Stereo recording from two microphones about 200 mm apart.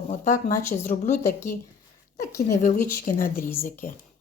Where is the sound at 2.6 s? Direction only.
40° left (ahead or behind).